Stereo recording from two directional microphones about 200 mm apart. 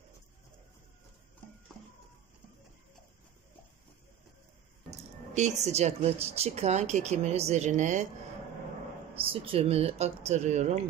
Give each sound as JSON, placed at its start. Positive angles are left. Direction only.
{"t": 5.3, "sound": "a woman's voice", "side_deg": -35}
{"t": 9.1, "sound": "a woman's voice", "side_deg": -25}